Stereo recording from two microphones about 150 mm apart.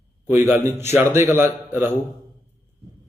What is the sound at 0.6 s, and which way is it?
A man's voice, 15° right (ahead or behind).